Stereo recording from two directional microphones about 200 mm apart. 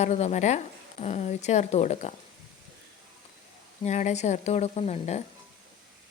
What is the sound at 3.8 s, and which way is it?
Speech, 35° left (ahead or behind).